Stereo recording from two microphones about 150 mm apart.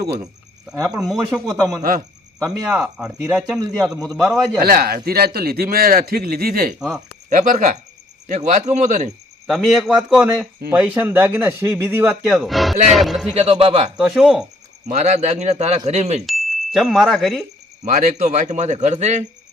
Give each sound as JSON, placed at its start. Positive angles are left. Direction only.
{"t": 0.0, "sound": "speech", "side_deg": -90}
{"t": 0.8, "sound": "speech", "side_deg": -20}
{"t": 1.5, "sound": "a man's voice", "side_deg": 0}
{"t": 1.8, "sound": "a man's voice", "side_deg": -70}
{"t": 2.7, "sound": "a man's voice", "side_deg": -5}
{"t": 4.6, "sound": "a man's voice", "side_deg": -80}
{"t": 7.3, "sound": "speech", "side_deg": -60}
{"t": 9.5, "sound": "a man's voice", "side_deg": 0}
{"t": 12.2, "sound": "a man's voice", "side_deg": 0}
{"t": 13.3, "sound": "a man's voice", "side_deg": -45}
{"t": 13.9, "sound": "a man's voice", "side_deg": -5}
{"t": 14.8, "sound": "a man's voice", "side_deg": -50}
{"t": 16.2, "sound": "chime", "side_deg": 0}
{"t": 17.8, "sound": "a man's voice", "side_deg": -60}